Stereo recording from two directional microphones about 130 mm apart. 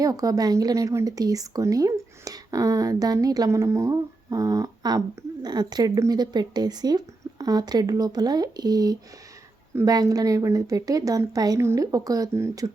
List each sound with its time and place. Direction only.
0.0 s speech: 25° right (ahead or behind)